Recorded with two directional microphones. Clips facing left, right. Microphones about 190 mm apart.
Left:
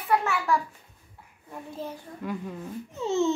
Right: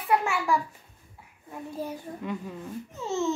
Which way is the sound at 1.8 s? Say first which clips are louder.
Right 2 dB; 15° right (ahead or behind).